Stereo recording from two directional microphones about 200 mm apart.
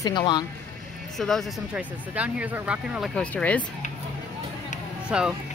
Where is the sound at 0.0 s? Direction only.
20° left (ahead or behind).